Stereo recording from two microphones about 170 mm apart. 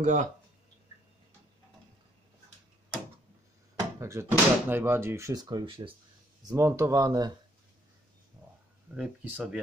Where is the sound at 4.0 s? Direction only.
15° right (ahead or behind); by 5.9 s 30° right (ahead or behind).